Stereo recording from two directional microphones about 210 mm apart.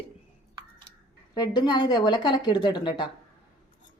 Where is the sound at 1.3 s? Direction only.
20° left (ahead or behind).